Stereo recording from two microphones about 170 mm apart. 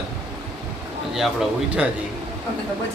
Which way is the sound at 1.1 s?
Centre (ahead or behind).